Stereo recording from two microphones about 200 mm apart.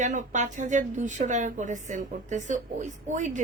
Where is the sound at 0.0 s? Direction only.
40° right (ahead or behind).